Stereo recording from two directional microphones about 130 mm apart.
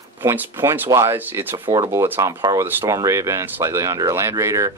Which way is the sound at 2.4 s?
35° right (ahead or behind).